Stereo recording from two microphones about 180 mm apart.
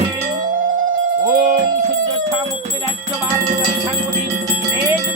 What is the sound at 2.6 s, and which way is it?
Music, 40° right (ahead or behind).